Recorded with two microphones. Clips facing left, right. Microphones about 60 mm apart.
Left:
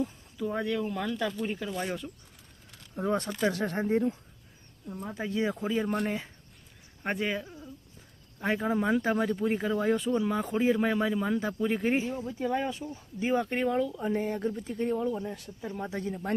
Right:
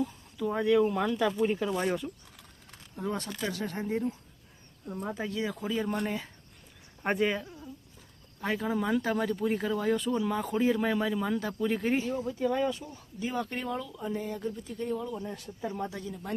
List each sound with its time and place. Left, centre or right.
0.0 s speech: centre
2.9 s speech: left
5.3 s speech: left
7.0 s speech: centre
8.4 s speech: left
14.0 s speech: left
15.2 s speech: centre
15.9 s speech: left